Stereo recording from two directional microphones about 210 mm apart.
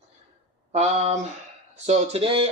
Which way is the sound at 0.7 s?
30° right (ahead or behind).